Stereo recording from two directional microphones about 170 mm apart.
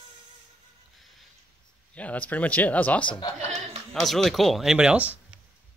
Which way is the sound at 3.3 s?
40° right (ahead or behind).